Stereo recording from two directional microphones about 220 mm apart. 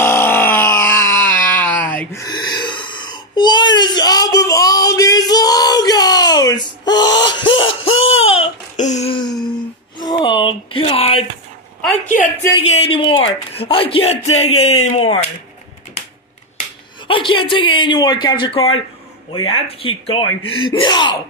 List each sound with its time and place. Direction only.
0.0 s wail: 10° left (ahead or behind)
7.5 s a sound: 65° left (ahead or behind)
8.0 s baby cry: 25° left (ahead or behind)
9.9 s a sound: 20° left (ahead or behind)
12.6 s speech: 25° left (ahead or behind)
17.1 s speech: 25° left (ahead or behind)
19.3 s speech: 70° left (ahead or behind)
19.8 s speech: 25° left (ahead or behind)